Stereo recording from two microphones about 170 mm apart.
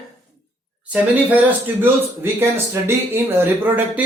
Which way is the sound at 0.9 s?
10° right (ahead or behind).